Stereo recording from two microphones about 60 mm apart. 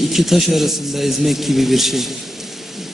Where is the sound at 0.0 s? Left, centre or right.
Centre.